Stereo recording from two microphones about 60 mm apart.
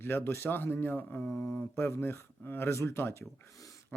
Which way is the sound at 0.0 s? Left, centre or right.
Left.